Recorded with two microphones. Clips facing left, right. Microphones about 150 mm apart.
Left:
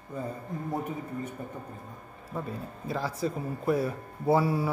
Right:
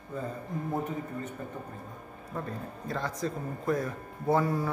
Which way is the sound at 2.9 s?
5° left (ahead or behind).